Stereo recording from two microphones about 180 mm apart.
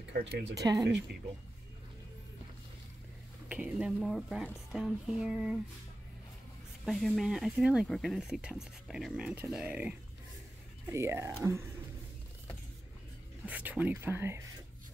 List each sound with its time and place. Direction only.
0.1 s speech: 75° right (ahead or behind)
0.6 s speech: 20° right (ahead or behind)
3.4 s speech: 5° right (ahead or behind)
6.8 s speech: centre (ahead or behind)
13.5 s speech: 10° right (ahead or behind)